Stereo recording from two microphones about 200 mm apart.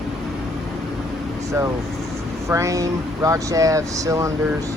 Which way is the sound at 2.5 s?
15° right (ahead or behind).